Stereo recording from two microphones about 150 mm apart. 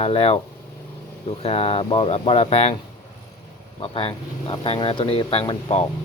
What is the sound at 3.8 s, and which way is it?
Speech, 40° left (ahead or behind).